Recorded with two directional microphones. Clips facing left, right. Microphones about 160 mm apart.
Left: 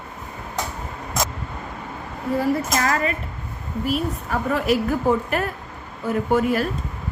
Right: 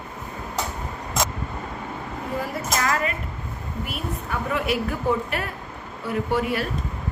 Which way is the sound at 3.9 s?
40° left (ahead or behind).